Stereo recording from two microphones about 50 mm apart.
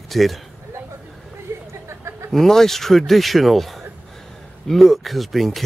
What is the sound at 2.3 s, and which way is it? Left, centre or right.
Speech, centre.